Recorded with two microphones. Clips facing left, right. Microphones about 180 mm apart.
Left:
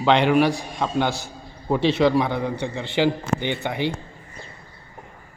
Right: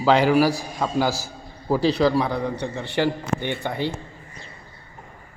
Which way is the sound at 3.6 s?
20° left (ahead or behind).